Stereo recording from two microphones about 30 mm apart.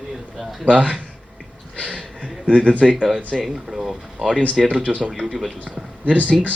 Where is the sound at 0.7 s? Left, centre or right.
Right.